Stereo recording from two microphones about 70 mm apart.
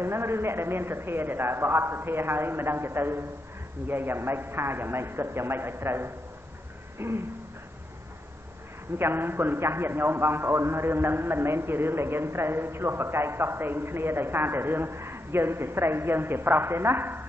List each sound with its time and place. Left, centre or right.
0.0 s a man's voice: right
8.9 s a man's voice: right